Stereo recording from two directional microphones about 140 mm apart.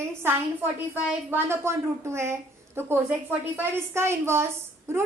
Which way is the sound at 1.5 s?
20° right (ahead or behind).